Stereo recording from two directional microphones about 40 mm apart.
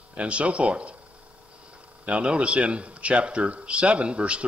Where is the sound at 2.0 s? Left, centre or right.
Right.